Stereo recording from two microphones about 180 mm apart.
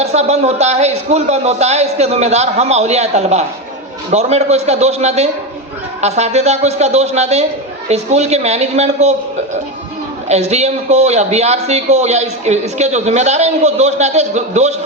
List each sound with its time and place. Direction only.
0.0 s a man's voice: 35° right (ahead or behind)
10.2 s a man's voice: 35° right (ahead or behind)